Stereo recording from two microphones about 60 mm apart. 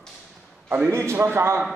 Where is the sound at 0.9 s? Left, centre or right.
Right.